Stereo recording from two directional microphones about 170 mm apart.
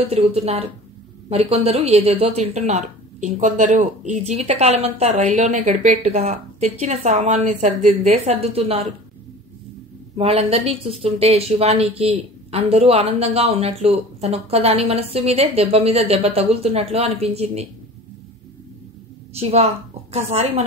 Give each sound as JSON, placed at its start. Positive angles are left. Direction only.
{"t": 0.1, "sound": "speech", "side_deg": -35}
{"t": 10.1, "sound": "speech", "side_deg": -35}
{"t": 19.3, "sound": "a woman's voice", "side_deg": -35}